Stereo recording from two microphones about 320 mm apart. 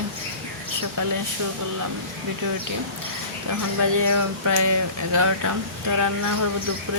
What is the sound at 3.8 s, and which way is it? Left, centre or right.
Speech, right.